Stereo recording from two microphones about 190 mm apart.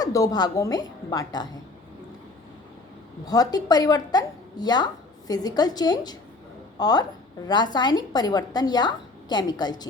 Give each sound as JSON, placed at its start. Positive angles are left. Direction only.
{"t": 0.0, "sound": "a woman's voice", "side_deg": 20}
{"t": 3.2, "sound": "a woman's voice", "side_deg": 20}